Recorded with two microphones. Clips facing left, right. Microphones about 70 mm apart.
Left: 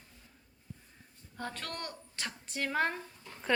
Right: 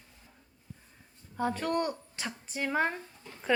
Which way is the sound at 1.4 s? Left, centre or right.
Centre.